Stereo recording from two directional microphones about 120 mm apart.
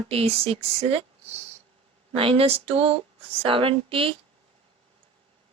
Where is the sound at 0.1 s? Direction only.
55° right (ahead or behind).